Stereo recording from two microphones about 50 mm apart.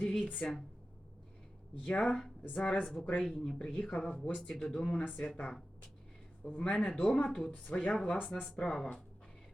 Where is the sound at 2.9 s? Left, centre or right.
Left.